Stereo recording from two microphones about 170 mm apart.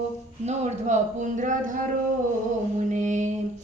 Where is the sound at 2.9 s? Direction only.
45° right (ahead or behind).